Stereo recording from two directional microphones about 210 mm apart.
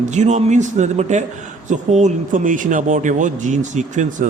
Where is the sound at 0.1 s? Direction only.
35° right (ahead or behind).